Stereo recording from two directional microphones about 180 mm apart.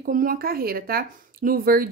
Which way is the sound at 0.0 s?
50° right (ahead or behind).